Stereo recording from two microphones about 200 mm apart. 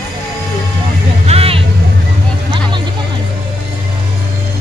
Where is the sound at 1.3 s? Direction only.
30° right (ahead or behind).